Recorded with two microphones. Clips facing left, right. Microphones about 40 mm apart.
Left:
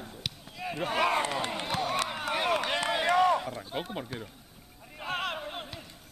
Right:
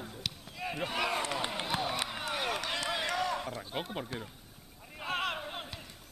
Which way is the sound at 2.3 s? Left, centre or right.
Left.